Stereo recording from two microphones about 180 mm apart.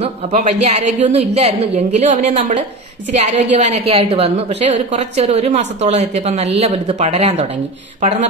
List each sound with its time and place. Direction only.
0.3 s a woman's voice: 40° right (ahead or behind)